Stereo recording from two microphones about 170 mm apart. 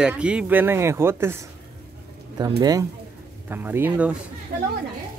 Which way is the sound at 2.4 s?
20° right (ahead or behind).